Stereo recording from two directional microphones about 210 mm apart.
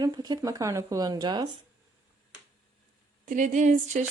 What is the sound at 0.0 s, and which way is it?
Speech, 20° right (ahead or behind).